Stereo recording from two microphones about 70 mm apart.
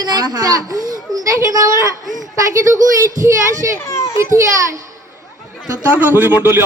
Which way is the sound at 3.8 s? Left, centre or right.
Left.